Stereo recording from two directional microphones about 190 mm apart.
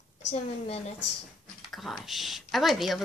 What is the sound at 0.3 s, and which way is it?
Speech, 30° left (ahead or behind).